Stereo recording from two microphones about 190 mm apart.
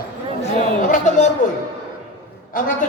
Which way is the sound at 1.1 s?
40° left (ahead or behind).